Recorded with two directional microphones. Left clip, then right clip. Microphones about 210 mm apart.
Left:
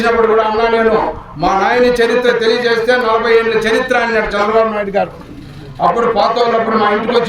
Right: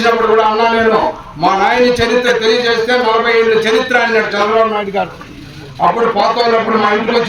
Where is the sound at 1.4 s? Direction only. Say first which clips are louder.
Right 1 dB; 15° left (ahead or behind).